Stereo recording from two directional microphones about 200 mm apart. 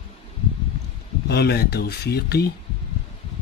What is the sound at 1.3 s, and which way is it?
Speech, 55° left (ahead or behind).